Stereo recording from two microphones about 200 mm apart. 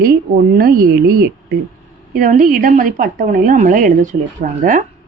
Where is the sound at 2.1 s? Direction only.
40° right (ahead or behind).